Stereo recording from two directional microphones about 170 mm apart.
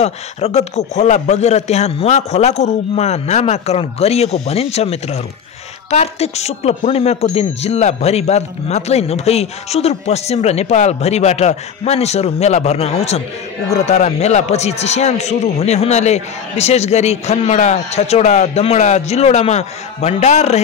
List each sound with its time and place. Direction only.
0.0 s speech: 40° left (ahead or behind)